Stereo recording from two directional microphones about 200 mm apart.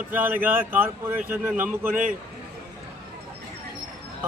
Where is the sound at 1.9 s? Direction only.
40° right (ahead or behind).